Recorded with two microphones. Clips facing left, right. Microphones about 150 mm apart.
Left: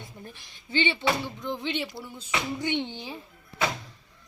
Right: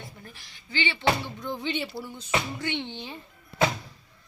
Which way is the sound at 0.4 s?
20° left (ahead or behind).